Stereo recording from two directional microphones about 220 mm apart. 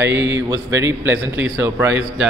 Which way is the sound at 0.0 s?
10° right (ahead or behind).